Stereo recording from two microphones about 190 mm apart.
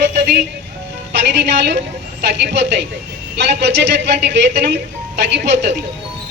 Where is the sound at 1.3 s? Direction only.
65° right (ahead or behind).